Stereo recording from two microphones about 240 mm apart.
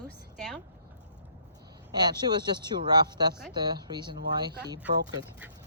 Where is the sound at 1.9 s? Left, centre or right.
Centre.